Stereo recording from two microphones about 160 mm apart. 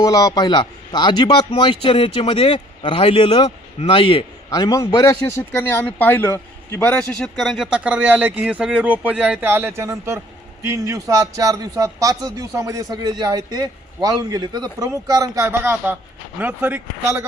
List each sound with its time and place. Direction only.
0.0 s a man's voice: 20° left (ahead or behind)
4.4 s a man's voice: 20° left (ahead or behind); by 17.2 s 10° right (ahead or behind)